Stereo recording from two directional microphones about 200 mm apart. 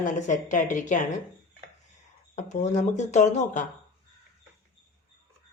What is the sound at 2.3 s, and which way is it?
Speech, 35° left (ahead or behind).